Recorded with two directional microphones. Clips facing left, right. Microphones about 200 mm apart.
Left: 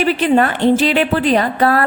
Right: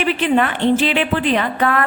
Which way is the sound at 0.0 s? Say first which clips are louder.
Left 3 dB; 40° left (ahead or behind).